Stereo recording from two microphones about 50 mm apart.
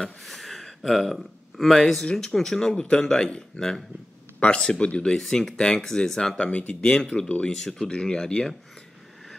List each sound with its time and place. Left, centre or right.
0.0 s a man's voice: centre; by 5.1 s left
5.1 s a man's voice: centre
6.3 s a man's voice: left
7.2 s speech: left
7.5 s a man's voice: centre